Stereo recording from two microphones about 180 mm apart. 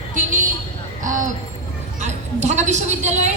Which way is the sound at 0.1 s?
45° right (ahead or behind).